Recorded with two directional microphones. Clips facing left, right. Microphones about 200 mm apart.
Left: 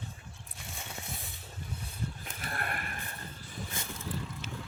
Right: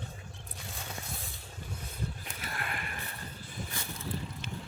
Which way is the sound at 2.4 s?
50° left (ahead or behind).